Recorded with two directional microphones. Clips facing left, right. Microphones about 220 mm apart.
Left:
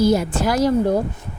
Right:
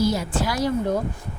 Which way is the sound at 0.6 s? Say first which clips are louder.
Left 6 dB; 35° left (ahead or behind).